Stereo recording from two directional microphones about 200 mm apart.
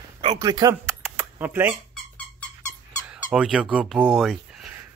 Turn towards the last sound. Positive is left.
turn(degrees=-5)  # may be behind; listen again after turning